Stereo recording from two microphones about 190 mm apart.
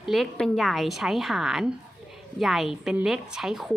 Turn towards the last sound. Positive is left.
turn(degrees=0)  # may be behind; listen again after turning